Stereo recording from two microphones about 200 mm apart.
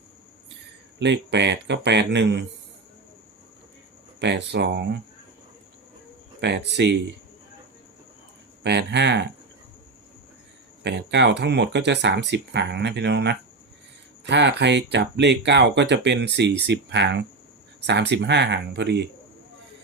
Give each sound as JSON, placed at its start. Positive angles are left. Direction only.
{"t": 0.9, "sound": "speech", "side_deg": -60}
{"t": 4.2, "sound": "speech", "side_deg": -60}
{"t": 6.4, "sound": "speech", "side_deg": -60}
{"t": 8.6, "sound": "speech", "side_deg": -60}
{"t": 10.8, "sound": "speech", "side_deg": -60}